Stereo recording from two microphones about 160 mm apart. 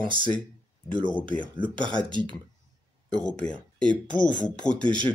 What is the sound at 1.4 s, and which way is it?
Speech, 30° right (ahead or behind).